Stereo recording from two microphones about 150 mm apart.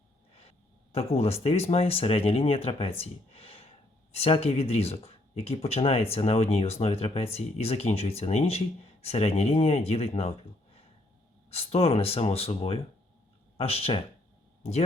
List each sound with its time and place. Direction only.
0.9 s speech: 40° left (ahead or behind)